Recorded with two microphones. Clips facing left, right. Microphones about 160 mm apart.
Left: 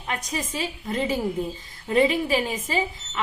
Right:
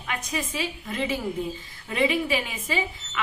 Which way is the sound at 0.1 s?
35° left (ahead or behind).